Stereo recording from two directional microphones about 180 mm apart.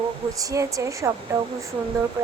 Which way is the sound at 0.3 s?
20° right (ahead or behind).